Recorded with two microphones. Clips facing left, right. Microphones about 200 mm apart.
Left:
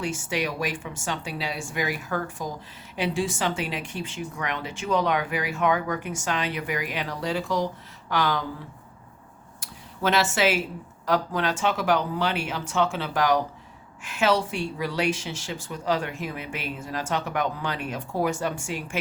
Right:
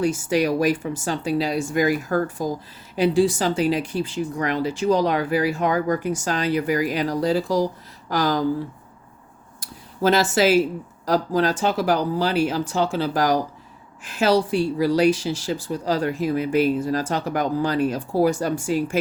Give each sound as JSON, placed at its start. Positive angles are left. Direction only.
{"t": 0.0, "sound": "speech", "side_deg": -40}
{"t": 9.6, "sound": "a sound", "side_deg": -35}
{"t": 11.0, "sound": "speech", "side_deg": -35}